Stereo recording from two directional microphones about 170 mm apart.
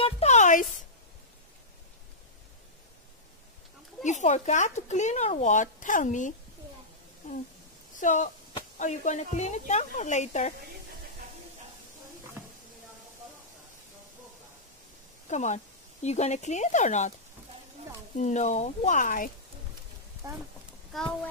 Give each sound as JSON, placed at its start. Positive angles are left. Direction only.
{"t": 0.0, "sound": "a sound", "side_deg": 40}
{"t": 4.0, "sound": "speech", "side_deg": 45}
{"t": 7.2, "sound": "a sound", "side_deg": 45}
{"t": 8.0, "sound": "speech", "side_deg": 50}
{"t": 15.2, "sound": "speech", "side_deg": 45}
{"t": 18.1, "sound": "speech", "side_deg": 45}
{"t": 20.9, "sound": "speech", "side_deg": 5}